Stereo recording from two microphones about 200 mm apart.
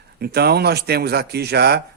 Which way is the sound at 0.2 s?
55° right (ahead or behind).